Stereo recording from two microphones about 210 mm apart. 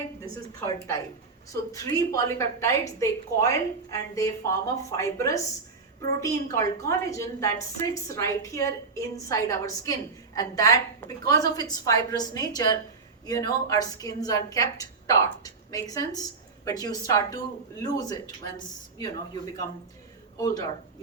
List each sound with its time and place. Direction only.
0.6 s a woman's voice: 15° left (ahead or behind)